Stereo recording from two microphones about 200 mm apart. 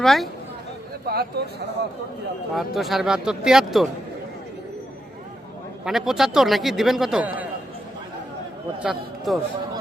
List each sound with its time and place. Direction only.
0.0 s a man's voice: centre (ahead or behind)
1.0 s speech: 50° right (ahead or behind)
2.6 s a man's voice: centre (ahead or behind)
5.8 s a man's voice: centre (ahead or behind)
8.8 s a man's voice: centre (ahead or behind)